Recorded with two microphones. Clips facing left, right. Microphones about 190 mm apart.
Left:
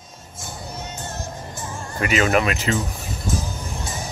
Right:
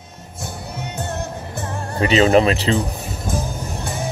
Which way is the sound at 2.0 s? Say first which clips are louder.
Right 6 dB; 30° right (ahead or behind).